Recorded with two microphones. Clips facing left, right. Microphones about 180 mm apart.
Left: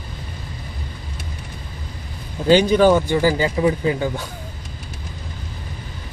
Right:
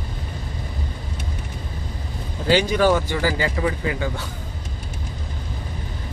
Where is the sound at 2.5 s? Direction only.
20° left (ahead or behind).